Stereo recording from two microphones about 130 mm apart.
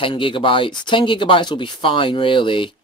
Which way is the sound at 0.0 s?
40° left (ahead or behind).